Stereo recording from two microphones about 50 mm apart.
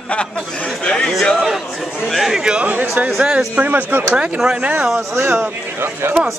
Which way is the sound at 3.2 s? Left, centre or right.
Right.